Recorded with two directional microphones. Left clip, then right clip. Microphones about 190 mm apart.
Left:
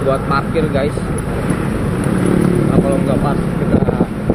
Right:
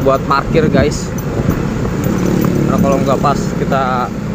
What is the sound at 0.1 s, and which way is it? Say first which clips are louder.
Speech: right 4 dB; 35° right (ahead or behind).